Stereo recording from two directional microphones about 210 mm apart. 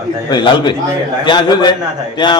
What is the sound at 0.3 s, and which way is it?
A man's voice, 20° left (ahead or behind).